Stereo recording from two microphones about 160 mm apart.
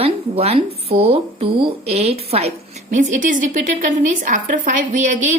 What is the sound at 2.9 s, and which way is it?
A woman's voice, 50° right (ahead or behind).